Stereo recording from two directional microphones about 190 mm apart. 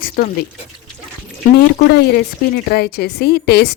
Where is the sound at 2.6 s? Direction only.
55° left (ahead or behind).